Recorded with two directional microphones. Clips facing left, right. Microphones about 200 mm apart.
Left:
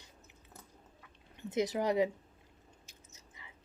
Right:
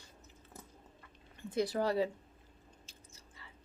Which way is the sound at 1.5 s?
20° left (ahead or behind).